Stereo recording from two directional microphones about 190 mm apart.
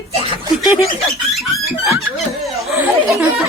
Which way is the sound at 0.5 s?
Centre (ahead or behind).